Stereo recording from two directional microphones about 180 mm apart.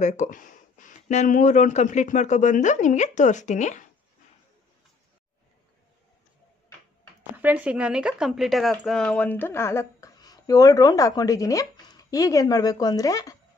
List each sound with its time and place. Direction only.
0.0 s speech: 45° left (ahead or behind)
7.3 s speech: 10° right (ahead or behind); by 13.4 s 20° left (ahead or behind)